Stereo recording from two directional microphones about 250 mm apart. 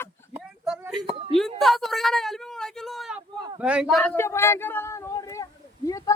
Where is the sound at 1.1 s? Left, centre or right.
Right.